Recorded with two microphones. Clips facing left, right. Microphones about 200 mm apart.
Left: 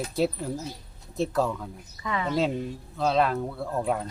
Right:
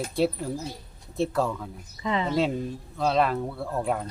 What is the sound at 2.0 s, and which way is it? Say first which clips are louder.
Speech: right 2 dB; 25° right (ahead or behind).